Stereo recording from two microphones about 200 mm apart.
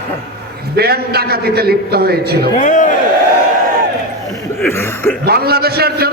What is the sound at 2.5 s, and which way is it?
Speech, 40° left (ahead or behind).